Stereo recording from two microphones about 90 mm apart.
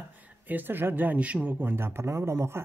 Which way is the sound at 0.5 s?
20° right (ahead or behind).